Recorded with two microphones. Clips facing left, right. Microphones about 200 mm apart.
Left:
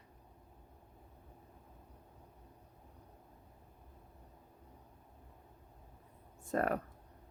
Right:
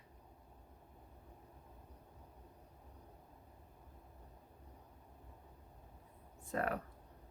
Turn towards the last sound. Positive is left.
turn(degrees=45)  # may be behind; listen again after turning